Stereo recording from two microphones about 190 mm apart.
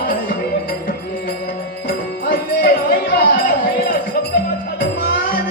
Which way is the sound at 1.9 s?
55° left (ahead or behind).